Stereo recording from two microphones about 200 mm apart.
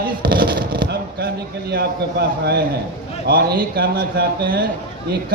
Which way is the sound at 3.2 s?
50° right (ahead or behind).